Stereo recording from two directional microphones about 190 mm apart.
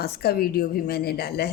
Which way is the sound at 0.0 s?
55° left (ahead or behind).